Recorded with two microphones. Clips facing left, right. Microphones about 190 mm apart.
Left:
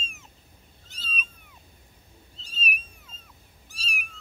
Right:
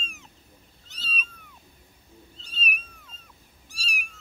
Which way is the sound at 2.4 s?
10° left (ahead or behind).